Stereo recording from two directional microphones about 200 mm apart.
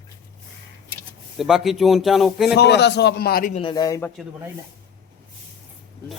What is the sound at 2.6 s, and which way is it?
Speech, 55° left (ahead or behind).